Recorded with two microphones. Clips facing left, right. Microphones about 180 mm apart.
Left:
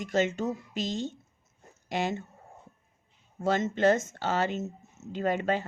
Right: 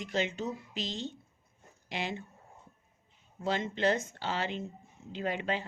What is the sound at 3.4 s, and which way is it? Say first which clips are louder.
A woman's voice: left 5 dB; 45° left (ahead or behind).